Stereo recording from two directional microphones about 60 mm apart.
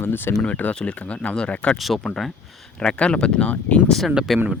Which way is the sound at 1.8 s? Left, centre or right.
Centre.